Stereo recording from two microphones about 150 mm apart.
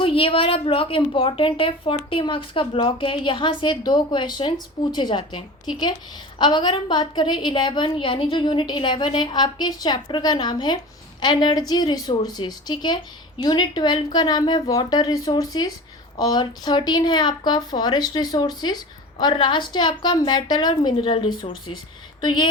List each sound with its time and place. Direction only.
0.0 s a woman's voice: 35° left (ahead or behind)